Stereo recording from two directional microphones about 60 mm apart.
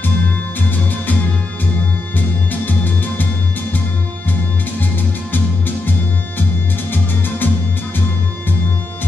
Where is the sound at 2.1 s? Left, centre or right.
Left.